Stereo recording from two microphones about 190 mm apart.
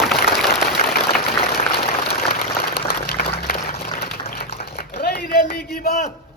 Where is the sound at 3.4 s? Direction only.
50° left (ahead or behind).